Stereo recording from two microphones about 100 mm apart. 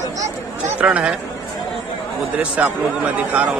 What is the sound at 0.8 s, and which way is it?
Speech, 10° right (ahead or behind).